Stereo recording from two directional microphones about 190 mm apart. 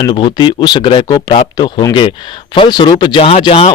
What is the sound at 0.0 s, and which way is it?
Speech, 25° left (ahead or behind).